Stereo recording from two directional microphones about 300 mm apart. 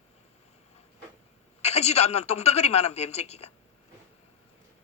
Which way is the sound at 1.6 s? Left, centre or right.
Left.